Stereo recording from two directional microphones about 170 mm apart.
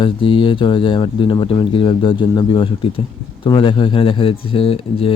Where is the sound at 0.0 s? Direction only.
30° left (ahead or behind).